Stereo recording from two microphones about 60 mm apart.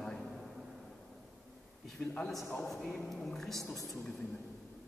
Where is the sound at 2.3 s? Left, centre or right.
Centre.